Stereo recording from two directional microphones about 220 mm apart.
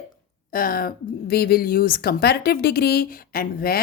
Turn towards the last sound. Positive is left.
turn(degrees=45)  # may be behind; listen again after turning